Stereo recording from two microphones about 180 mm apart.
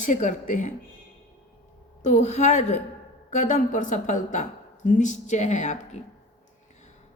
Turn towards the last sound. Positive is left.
turn(degrees=40)  # may be behind; listen again after turning